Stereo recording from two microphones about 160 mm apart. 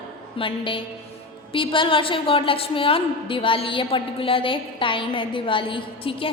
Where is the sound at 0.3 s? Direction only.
35° left (ahead or behind).